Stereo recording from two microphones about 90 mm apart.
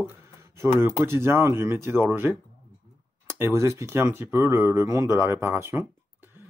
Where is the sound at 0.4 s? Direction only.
25° right (ahead or behind).